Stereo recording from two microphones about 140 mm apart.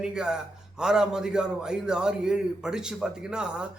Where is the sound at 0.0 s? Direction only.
5° right (ahead or behind).